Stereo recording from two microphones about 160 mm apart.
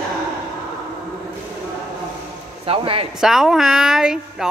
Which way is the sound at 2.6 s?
35° right (ahead or behind).